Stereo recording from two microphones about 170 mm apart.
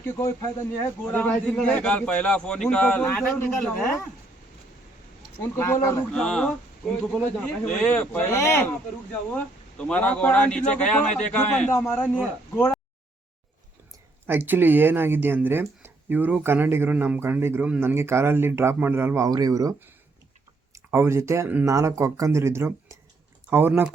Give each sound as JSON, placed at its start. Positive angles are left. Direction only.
{"t": 0.0, "sound": "a man's voice", "side_deg": 15}
{"t": 5.4, "sound": "a man's voice", "side_deg": 15}
{"t": 6.1, "sound": "speech", "side_deg": 5}
{"t": 7.6, "sound": "a man's voice", "side_deg": 5}
{"t": 14.3, "sound": "speech", "side_deg": -10}